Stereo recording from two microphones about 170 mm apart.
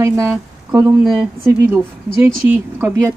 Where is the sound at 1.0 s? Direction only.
Centre (ahead or behind).